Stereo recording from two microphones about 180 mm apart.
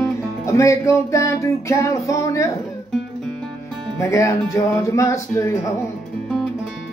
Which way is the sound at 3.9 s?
15° left (ahead or behind).